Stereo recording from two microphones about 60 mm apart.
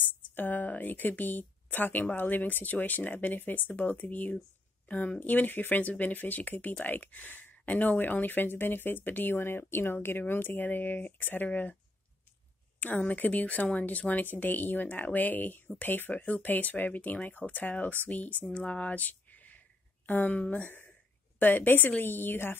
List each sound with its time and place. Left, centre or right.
0.0 s speech: left
12.8 s speech: left